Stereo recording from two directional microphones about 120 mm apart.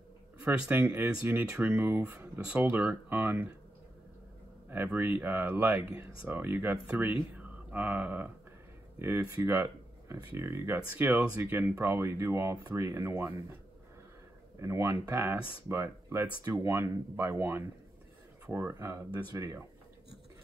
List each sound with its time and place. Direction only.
0.4 s speech: 15° right (ahead or behind)
4.6 s speech: 15° right (ahead or behind)
7.3 s a sound: 15° right (ahead or behind)
8.9 s speech: 20° right (ahead or behind)
14.6 s speech: 25° right (ahead or behind)